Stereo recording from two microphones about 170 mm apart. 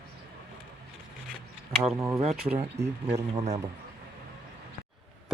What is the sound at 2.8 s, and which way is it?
Speech, 80° right.